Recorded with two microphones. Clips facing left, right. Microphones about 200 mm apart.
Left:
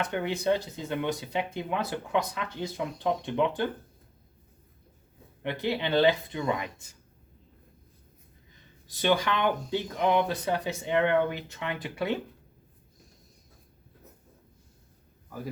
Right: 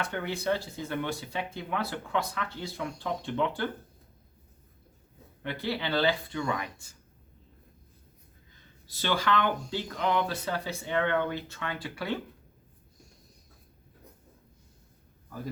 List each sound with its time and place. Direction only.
0.0 s speech: 20° left (ahead or behind)
5.4 s speech: 20° left (ahead or behind)
8.9 s speech: 20° left (ahead or behind)